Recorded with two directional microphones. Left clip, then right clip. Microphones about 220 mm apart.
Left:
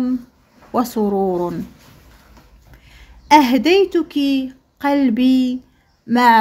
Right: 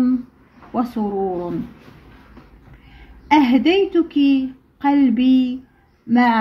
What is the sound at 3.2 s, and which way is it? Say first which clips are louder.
Speech: left 3 dB; 50° left (ahead or behind).